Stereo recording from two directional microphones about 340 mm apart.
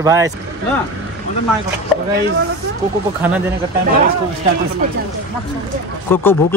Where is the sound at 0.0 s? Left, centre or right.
Centre.